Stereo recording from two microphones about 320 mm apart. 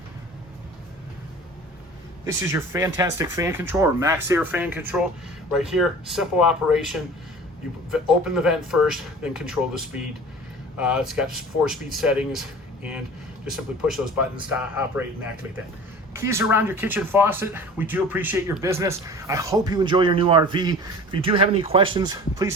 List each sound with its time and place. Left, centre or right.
2.2 s speech: centre